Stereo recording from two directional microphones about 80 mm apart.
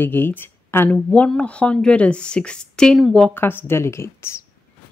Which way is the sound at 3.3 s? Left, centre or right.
Left.